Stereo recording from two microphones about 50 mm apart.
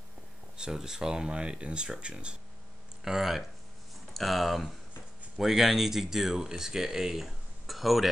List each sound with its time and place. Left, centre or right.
0.6 s speech: centre
3.0 s speech: centre